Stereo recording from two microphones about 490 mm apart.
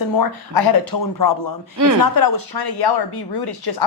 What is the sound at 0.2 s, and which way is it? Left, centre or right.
A man's voice, left.